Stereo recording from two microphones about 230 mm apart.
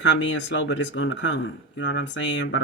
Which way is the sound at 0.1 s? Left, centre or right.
Left.